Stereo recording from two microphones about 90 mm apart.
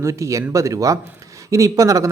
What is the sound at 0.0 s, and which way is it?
Speech, 35° right (ahead or behind).